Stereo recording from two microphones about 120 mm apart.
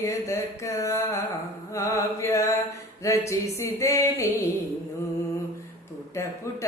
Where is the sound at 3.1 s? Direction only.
25° left (ahead or behind).